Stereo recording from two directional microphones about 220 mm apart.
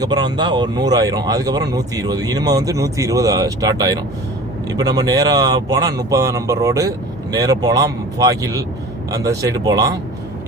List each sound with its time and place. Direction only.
0.0 s speech: 20° right (ahead or behind)